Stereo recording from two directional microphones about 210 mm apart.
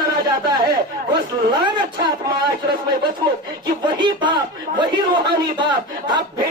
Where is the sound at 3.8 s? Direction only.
20° right (ahead or behind).